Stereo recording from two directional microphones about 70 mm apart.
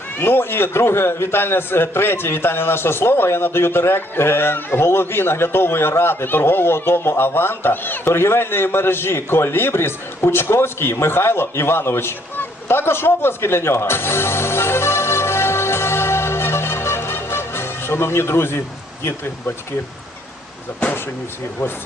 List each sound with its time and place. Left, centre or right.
0.2 s a man's voice: left